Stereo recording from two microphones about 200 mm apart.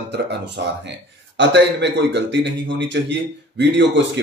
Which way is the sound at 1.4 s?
60° right (ahead or behind).